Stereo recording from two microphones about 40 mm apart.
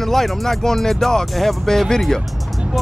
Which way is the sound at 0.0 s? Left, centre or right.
Centre.